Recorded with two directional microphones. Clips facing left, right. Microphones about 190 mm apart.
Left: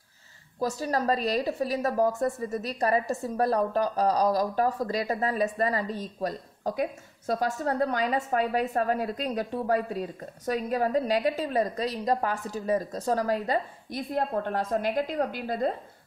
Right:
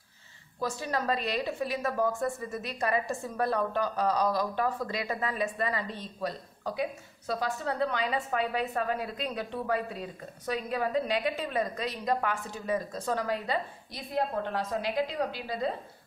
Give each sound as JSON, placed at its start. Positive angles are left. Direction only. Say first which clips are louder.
{"t": 0.6, "sound": "a woman's voice", "louder": "left 4 dB", "side_deg": 40}